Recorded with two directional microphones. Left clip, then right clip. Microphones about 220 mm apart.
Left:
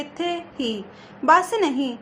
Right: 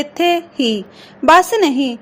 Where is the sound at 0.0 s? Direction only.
25° right (ahead or behind).